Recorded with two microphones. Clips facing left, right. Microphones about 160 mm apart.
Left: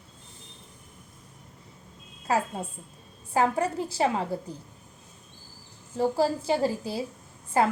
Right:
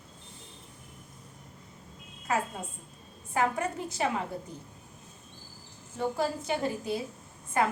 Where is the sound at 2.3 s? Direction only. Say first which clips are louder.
Left 4 dB; 35° left (ahead or behind).